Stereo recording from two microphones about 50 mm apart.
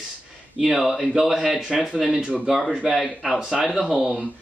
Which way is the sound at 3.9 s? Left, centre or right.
Centre.